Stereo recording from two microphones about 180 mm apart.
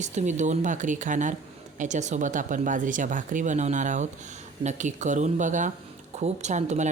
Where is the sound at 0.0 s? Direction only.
40° right (ahead or behind).